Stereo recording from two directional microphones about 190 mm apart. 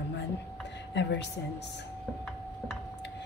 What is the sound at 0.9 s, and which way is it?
Speech, 65° left (ahead or behind).